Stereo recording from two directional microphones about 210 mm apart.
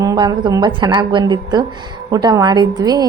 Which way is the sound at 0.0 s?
15° right (ahead or behind).